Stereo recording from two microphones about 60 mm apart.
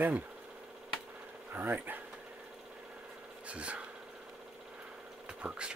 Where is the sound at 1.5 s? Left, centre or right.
Right.